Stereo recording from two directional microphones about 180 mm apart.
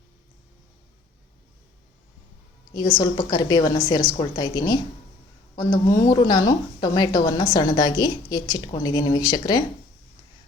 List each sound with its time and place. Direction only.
3.0 s a woman's voice: 20° left (ahead or behind)